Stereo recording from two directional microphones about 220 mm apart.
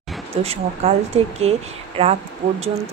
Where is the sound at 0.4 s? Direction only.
30° right (ahead or behind).